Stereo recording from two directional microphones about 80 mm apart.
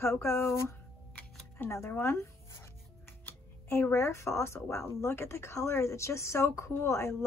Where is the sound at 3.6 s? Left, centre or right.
Left.